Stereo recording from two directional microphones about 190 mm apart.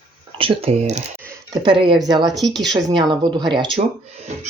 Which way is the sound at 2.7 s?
25° right (ahead or behind).